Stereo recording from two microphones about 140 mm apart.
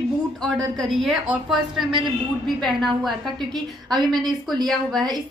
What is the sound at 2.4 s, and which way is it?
Speech, centre (ahead or behind).